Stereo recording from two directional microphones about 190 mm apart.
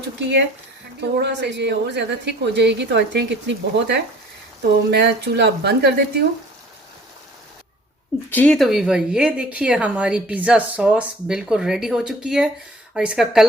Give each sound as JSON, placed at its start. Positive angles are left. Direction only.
{"t": 0.2, "sound": "speech", "side_deg": -65}
{"t": 8.3, "sound": "speech", "side_deg": 5}